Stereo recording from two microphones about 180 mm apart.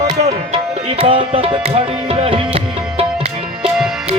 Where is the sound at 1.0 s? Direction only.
30° right (ahead or behind).